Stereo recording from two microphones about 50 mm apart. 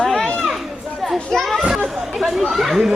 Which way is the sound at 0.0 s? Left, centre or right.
Centre.